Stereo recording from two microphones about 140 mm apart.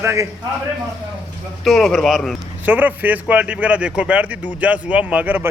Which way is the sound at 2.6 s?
10° right (ahead or behind).